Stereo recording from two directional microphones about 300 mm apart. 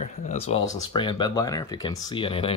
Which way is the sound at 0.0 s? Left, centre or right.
Left.